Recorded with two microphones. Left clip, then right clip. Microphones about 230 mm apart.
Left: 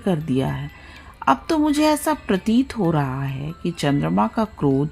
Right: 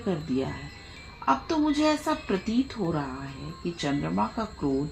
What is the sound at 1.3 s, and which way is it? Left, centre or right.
A woman's voice, left.